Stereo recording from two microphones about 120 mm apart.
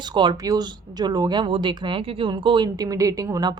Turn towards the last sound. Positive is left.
turn(degrees=-30)  # may be behind; listen again after turning